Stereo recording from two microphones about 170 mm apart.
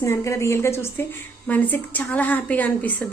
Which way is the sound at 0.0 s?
15° left (ahead or behind).